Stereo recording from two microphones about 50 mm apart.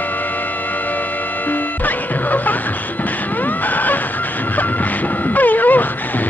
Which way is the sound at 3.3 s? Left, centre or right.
Left.